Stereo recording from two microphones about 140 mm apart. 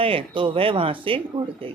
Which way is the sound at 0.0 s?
40° right (ahead or behind).